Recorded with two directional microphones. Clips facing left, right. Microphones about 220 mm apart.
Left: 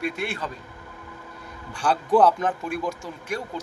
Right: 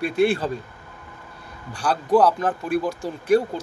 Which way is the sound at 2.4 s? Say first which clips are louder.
Right 4 dB; 35° right (ahead or behind).